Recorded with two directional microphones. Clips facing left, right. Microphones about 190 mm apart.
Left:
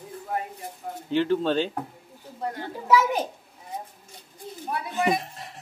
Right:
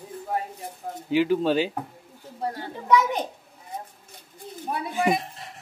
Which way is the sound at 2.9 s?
5° left (ahead or behind).